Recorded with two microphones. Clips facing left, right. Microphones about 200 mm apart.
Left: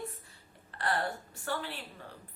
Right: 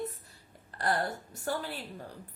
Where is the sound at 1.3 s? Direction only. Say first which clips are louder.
Right 5 dB; 40° right (ahead or behind).